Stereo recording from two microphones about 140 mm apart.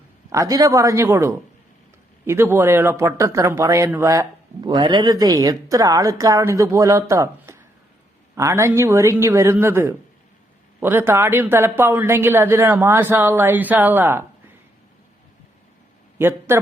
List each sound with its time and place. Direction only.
0.3 s a woman's voice: 25° right (ahead or behind)
4.6 s a woman's voice: 35° right (ahead or behind); by 14.3 s 15° right (ahead or behind)
16.1 s a man's voice: 15° right (ahead or behind)